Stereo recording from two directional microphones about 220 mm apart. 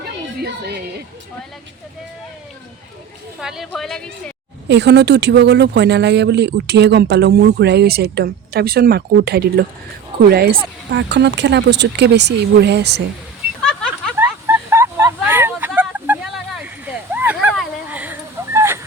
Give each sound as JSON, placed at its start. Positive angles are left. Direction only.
{"t": 0.4, "sound": "speech", "side_deg": -45}
{"t": 3.4, "sound": "a woman's voice", "side_deg": 0}
{"t": 4.7, "sound": "speech", "side_deg": -50}
{"t": 13.6, "sound": "a sound", "side_deg": 5}
{"t": 14.2, "sound": "vehicle", "side_deg": -10}
{"t": 16.8, "sound": "a sound", "side_deg": -5}
{"t": 17.8, "sound": "fowl", "side_deg": -5}